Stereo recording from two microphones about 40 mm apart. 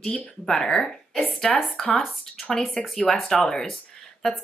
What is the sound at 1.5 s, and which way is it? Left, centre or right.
Speech, centre.